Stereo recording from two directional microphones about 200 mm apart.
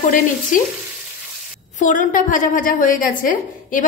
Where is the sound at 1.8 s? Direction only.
40° left (ahead or behind).